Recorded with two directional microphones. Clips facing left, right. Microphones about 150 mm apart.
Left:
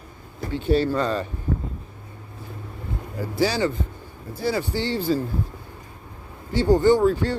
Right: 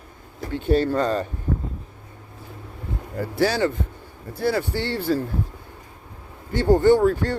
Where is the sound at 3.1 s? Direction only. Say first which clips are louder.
Right 1 dB; 55° right (ahead or behind).